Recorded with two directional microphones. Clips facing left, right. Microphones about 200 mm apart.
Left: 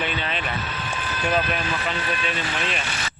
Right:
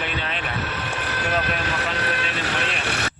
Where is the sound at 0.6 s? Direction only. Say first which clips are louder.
Right 2 dB; 65° right (ahead or behind).